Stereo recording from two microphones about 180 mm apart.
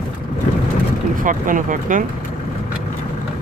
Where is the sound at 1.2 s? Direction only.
45° right (ahead or behind).